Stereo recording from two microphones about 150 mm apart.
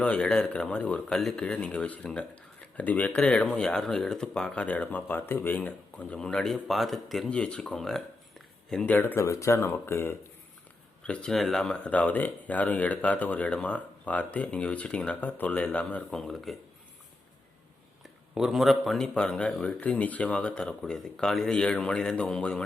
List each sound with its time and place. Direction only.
0.0 s speech: 5° left (ahead or behind)
18.3 s speech: centre (ahead or behind)